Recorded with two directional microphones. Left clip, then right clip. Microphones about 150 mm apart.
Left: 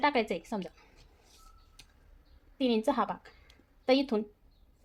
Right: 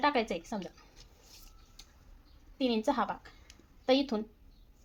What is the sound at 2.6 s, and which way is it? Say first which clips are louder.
A woman's voice: left 2 dB; 20° left (ahead or behind).